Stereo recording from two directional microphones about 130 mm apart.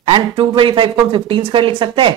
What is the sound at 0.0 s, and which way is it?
Speech, 40° right (ahead or behind).